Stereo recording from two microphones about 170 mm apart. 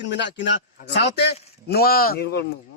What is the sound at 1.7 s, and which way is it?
Speech, 65° left (ahead or behind).